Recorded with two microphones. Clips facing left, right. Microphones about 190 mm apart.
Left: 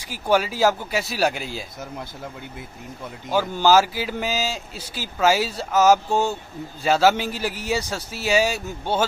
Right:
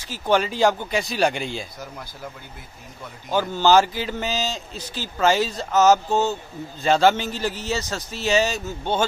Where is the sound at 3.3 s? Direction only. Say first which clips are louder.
Even; 10° left (ahead or behind).